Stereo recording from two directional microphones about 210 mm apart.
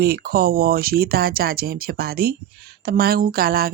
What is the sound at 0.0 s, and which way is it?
Speech, 45° right (ahead or behind).